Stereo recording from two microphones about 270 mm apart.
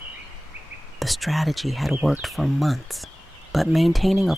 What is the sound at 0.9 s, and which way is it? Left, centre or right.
Speech, centre.